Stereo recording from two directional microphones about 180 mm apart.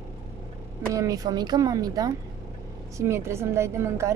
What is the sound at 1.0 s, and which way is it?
A woman's voice, 20° right (ahead or behind).